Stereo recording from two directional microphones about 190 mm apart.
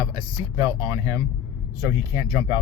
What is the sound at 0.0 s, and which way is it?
Speech, 20° right (ahead or behind).